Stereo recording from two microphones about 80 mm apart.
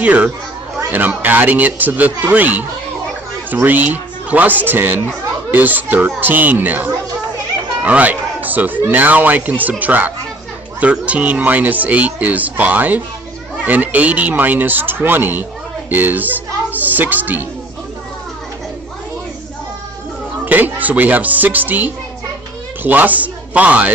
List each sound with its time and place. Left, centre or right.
0.0 s speech: centre
20.4 s speech: right